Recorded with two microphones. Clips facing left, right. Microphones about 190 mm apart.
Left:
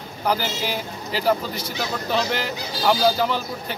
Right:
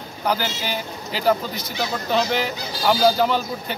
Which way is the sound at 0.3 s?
Centre (ahead or behind).